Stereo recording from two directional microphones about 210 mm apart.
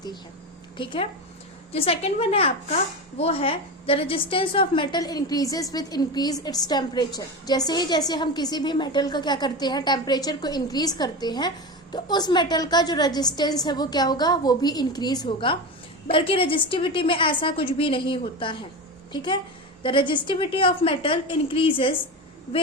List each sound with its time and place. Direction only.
0.8 s speech: 25° left (ahead or behind)